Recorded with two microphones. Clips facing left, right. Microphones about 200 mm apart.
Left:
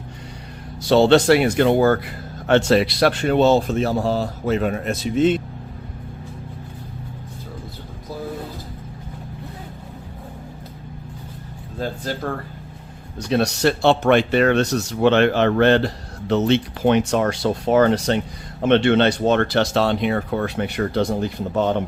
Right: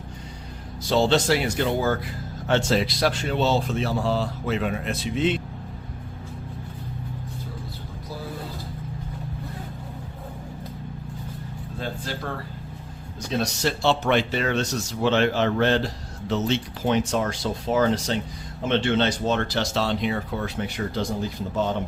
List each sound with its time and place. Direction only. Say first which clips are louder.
0.9 s speech: left 7 dB; 65° left (ahead or behind); by 5.4 s 45° left (ahead or behind)
11.8 s speech: left 6 dB; 40° left (ahead or behind)
13.3 s speech: left 7 dB; 65° left (ahead or behind)